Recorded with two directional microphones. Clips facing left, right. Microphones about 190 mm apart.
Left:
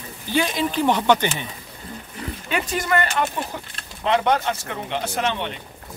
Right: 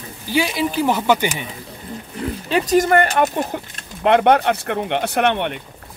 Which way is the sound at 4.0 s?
60° right (ahead or behind).